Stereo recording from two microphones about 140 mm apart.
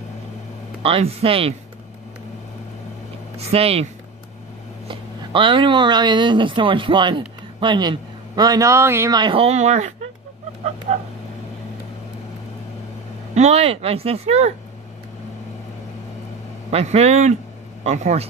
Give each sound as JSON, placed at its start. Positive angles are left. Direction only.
{"t": 0.8, "sound": "speech", "side_deg": -40}
{"t": 3.3, "sound": "speech", "side_deg": -45}
{"t": 4.8, "sound": "speech", "side_deg": -35}
{"t": 9.1, "sound": "speech", "side_deg": -35}
{"t": 13.3, "sound": "speech", "side_deg": -50}
{"t": 16.7, "sound": "speech", "side_deg": -50}